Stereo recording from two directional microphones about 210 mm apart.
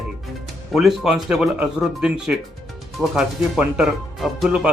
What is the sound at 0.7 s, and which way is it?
Speech, centre (ahead or behind).